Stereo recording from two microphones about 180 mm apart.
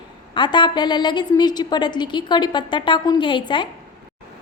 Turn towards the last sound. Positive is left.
turn(degrees=25)  # may be behind; listen again after turning